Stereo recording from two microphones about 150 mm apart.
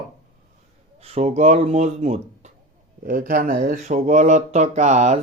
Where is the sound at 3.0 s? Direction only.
65° right (ahead or behind).